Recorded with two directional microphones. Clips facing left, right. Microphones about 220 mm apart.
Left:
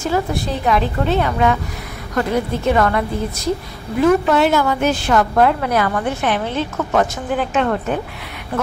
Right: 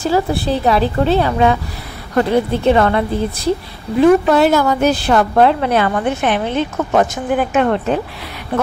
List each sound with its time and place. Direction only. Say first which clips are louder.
0.0 s a woman's voice: right 4 dB; 35° right (ahead or behind)
4.0 s a woman's voice: right 4 dB; 35° right (ahead or behind); by 7.6 s 15° right (ahead or behind)